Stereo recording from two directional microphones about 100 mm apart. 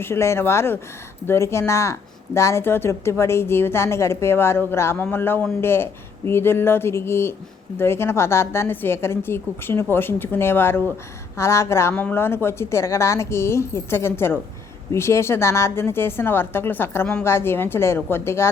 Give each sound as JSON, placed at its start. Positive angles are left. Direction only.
{"t": 0.0, "sound": "speech", "side_deg": 25}